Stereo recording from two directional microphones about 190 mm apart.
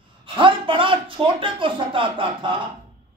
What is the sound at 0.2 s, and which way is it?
Speech, 25° right (ahead or behind).